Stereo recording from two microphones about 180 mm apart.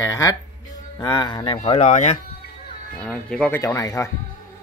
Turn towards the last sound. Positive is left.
turn(degrees=20)  # may be behind; listen again after turning